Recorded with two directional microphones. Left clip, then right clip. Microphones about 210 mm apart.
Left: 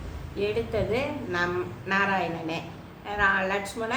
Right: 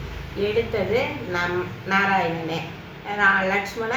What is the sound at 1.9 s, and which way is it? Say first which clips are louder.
Speech: right 5 dB; 30° left (ahead or behind).